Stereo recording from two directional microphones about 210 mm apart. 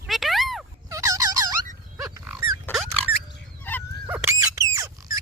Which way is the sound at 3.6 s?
10° left (ahead or behind).